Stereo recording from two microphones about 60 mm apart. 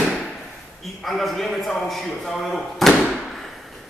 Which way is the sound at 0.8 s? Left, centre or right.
Centre.